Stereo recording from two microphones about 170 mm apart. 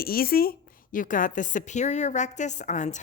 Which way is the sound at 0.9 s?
50° left (ahead or behind).